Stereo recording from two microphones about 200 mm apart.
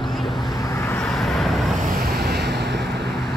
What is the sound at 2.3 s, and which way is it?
Vehicle, 55° right (ahead or behind).